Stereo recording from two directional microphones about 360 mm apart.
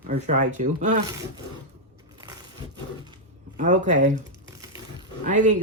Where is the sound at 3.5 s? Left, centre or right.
Right.